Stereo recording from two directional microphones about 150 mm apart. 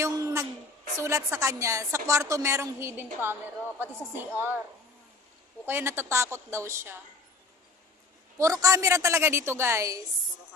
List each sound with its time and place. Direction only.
0.0 s a woman's voice: 20° right (ahead or behind)
5.7 s a woman's voice: 15° right (ahead or behind)
8.4 s speech: 20° right (ahead or behind)